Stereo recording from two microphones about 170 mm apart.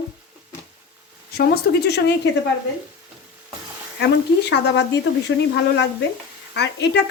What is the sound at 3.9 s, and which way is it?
Speech, 90° left.